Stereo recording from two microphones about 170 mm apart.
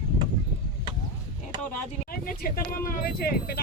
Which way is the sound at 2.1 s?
60° left (ahead or behind).